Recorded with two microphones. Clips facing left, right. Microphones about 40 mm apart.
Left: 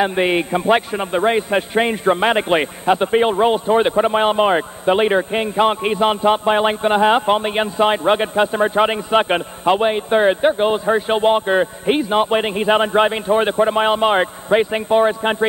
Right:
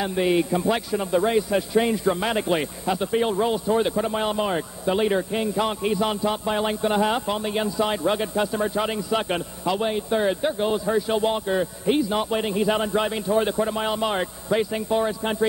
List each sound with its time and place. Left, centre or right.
0.0 s a man's voice: left